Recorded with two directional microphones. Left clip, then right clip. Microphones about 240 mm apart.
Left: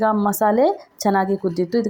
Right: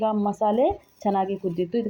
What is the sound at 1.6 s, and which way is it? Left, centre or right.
Speech, centre.